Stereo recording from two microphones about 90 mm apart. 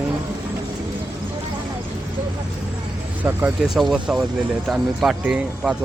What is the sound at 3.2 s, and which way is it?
Speech, 25° right (ahead or behind).